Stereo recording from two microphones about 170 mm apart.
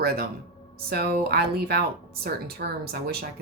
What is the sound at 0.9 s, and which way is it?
Speech, 70° right (ahead or behind).